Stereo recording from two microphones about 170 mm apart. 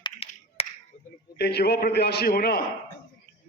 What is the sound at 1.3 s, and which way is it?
A man's voice, 75° left (ahead or behind).